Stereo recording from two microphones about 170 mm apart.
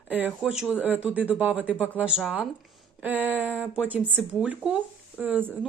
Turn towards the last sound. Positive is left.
turn(degrees=-10)  # may be behind; listen again after turning